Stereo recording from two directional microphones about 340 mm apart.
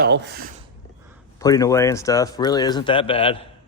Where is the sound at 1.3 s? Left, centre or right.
Centre.